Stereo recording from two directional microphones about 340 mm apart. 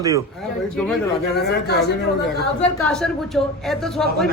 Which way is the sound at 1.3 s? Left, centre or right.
Left.